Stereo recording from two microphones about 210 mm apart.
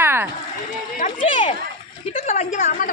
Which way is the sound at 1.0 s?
35° left (ahead or behind).